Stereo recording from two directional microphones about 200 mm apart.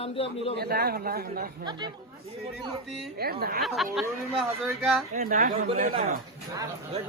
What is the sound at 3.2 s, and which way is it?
Speech, 50° right (ahead or behind).